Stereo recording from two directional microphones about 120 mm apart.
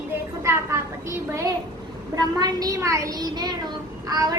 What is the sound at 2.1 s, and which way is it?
A child's voice, 30° right (ahead or behind).